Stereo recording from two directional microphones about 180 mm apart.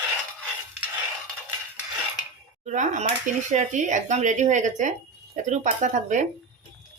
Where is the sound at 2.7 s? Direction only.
40° right (ahead or behind).